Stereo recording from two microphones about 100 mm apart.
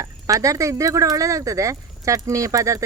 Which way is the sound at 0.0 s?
35° right (ahead or behind).